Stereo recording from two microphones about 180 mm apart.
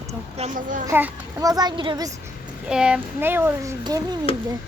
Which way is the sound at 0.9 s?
15° right (ahead or behind).